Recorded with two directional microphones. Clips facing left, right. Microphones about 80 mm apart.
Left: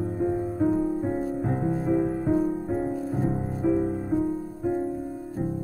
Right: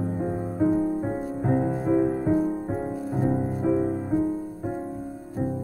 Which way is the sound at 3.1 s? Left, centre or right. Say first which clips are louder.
Right 2 dB; right.